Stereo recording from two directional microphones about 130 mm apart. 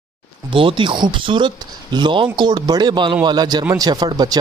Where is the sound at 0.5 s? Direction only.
40° right (ahead or behind).